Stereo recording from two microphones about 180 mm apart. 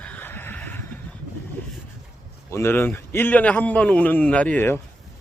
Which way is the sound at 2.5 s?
15° left (ahead or behind).